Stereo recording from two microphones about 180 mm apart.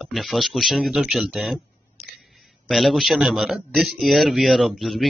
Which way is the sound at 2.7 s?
Centre (ahead or behind).